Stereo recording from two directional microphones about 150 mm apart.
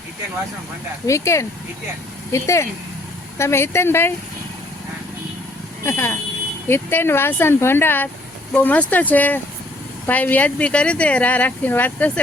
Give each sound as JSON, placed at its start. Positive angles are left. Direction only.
{"t": 1.0, "sound": "speech", "side_deg": 20}
{"t": 5.8, "sound": "speech", "side_deg": 15}